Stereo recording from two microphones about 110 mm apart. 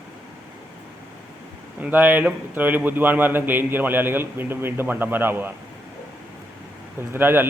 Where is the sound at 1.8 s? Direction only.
15° right (ahead or behind).